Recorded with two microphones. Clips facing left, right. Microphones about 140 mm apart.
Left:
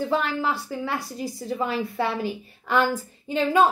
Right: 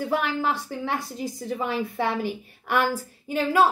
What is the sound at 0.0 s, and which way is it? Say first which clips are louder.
A woman's voice: left 1 dB; 15° right (ahead or behind).